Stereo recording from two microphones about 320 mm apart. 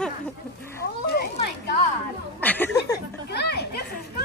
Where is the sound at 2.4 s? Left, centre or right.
Centre.